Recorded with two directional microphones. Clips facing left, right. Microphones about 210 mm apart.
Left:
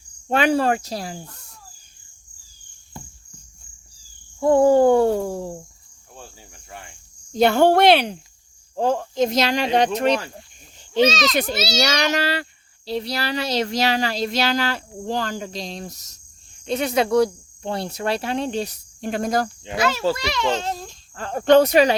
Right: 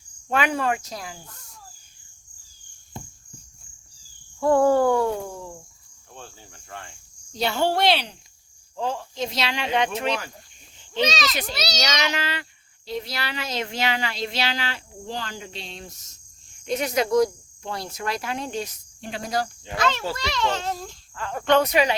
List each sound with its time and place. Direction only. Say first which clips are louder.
0.3 s speech: left 5 dB; 30° left (ahead or behind)
4.4 s cricket: left 4 dB; 20° left (ahead or behind); by 5.6 s 35° left (ahead or behind)
6.1 s cricket: left 1 dB; 10° left (ahead or behind)
7.3 s speech: left 8 dB; 55° left (ahead or behind)
11.0 s a child's voice: left 6 dB; centre (ahead or behind)
11.3 s speech: left 8 dB; 50° left (ahead or behind)
11.9 s speech: left 5 dB; 40° left (ahead or behind)
16.6 s cricket: left 3 dB; 30° left (ahead or behind)
17.2 s speech: left 2 dB; 30° left (ahead or behind)
19.1 s speech: left 5 dB; 50° left (ahead or behind)
19.6 s a child's voice: left 3 dB; 10° left (ahead or behind)
20.1 s cricket: left 3 dB; 10° left (ahead or behind)
21.2 s speech: left 6 dB; 35° left (ahead or behind)